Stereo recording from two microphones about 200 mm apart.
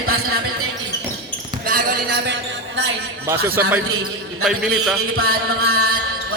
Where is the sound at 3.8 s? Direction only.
90° right.